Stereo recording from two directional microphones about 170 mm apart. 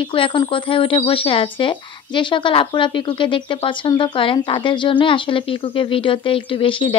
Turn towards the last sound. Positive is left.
turn(degrees=30)  # may be behind; listen again after turning